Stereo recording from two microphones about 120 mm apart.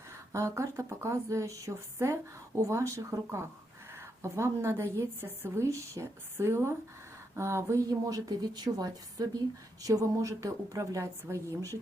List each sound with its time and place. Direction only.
0.3 s a woman's voice: 25° right (ahead or behind)